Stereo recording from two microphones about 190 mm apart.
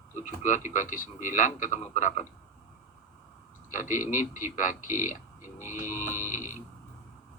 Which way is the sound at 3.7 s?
45° left (ahead or behind).